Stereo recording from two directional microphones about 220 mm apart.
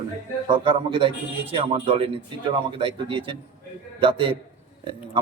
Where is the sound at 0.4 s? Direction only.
20° right (ahead or behind).